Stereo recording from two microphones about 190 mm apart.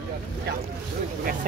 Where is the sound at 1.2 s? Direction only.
50° right (ahead or behind).